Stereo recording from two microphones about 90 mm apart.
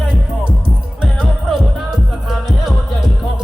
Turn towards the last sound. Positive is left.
turn(degrees=-5)  # may be behind; listen again after turning